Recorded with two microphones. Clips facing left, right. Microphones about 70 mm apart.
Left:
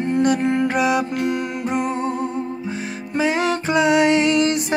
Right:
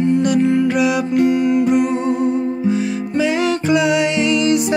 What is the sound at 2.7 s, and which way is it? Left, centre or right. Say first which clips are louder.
Music: right 8 dB; left.